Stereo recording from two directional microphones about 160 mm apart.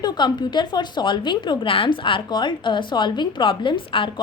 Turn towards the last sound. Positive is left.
turn(degrees=35)  # may be behind; listen again after turning